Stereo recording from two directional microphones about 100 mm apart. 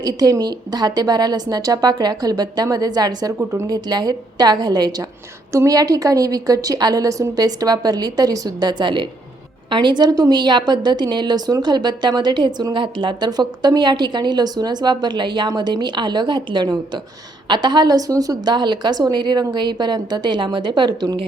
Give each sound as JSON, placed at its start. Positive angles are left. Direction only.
{"t": 0.0, "sound": "a woman's voice", "side_deg": -40}